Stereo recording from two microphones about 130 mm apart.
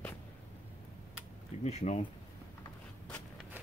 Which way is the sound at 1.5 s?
60° left (ahead or behind).